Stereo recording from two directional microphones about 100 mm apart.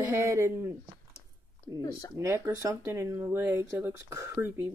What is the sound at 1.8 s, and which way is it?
Speech, 35° left (ahead or behind).